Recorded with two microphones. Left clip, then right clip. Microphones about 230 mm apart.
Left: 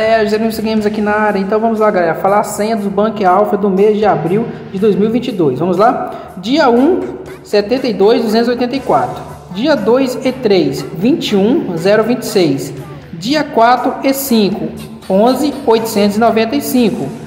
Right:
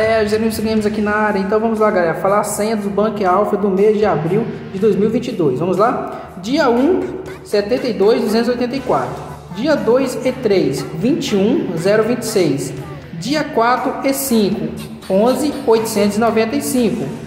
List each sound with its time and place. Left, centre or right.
0.0 s speech: centre